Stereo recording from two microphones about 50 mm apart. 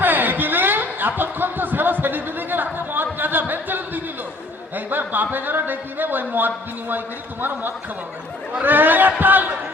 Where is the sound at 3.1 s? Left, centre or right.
Right.